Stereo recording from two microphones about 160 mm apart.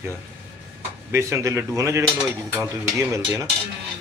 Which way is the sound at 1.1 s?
15° right (ahead or behind).